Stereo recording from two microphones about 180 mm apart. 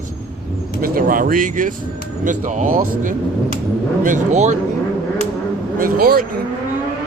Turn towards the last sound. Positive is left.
turn(degrees=-55)  # may be behind; listen again after turning